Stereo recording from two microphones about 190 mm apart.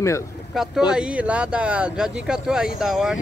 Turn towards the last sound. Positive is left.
turn(degrees=-5)  # may be behind; listen again after turning